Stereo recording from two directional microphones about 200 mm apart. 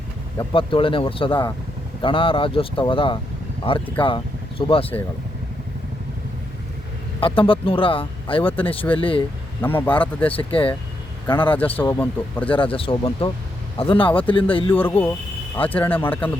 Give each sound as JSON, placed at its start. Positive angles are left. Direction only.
{"t": 0.3, "sound": "speech", "side_deg": 25}
{"t": 7.2, "sound": "speech", "side_deg": 25}
{"t": 9.6, "sound": "speech", "side_deg": 10}
{"t": 10.3, "sound": "speech", "side_deg": 25}
{"t": 11.5, "sound": "speech", "side_deg": 10}
{"t": 12.5, "sound": "speech", "side_deg": 25}
{"t": 14.7, "sound": "speech", "side_deg": 10}